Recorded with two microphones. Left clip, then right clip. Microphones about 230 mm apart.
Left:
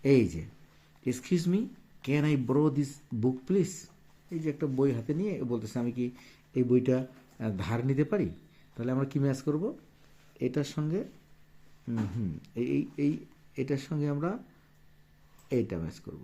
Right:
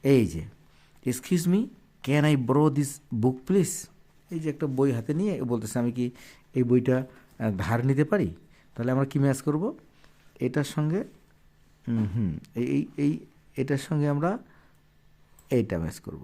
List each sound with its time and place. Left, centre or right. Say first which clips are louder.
0.0 s a man's voice: right 2 dB; right
15.4 s speech: right 5 dB; right